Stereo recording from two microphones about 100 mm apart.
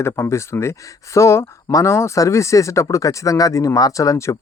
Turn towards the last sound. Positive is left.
turn(degrees=30)  # may be behind; listen again after turning